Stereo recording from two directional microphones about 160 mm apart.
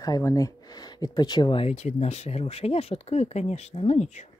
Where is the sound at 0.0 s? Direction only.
20° left (ahead or behind).